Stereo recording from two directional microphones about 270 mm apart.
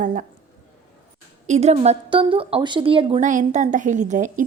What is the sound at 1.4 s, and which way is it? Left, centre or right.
Speech, right.